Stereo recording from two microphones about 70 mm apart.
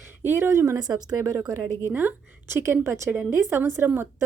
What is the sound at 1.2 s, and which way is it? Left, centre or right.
Speech, right.